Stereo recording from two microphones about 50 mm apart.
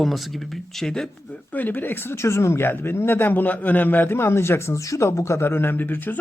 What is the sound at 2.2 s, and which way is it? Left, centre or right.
Speech, left.